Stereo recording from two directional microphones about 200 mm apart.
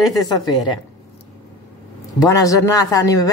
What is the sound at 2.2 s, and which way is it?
A woman's voice, 15° left (ahead or behind).